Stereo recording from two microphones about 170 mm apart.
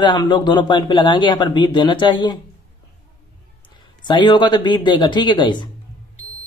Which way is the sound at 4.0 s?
25° left (ahead or behind).